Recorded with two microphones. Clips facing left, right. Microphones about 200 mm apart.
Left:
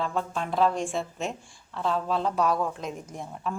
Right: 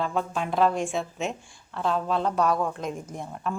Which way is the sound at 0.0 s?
Centre (ahead or behind).